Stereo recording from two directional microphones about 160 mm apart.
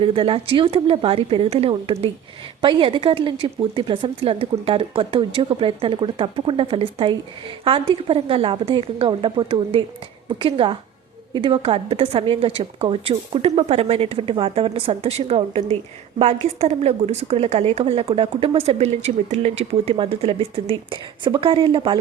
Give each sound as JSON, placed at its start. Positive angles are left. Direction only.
{"t": 0.0, "sound": "a woman's voice", "side_deg": -35}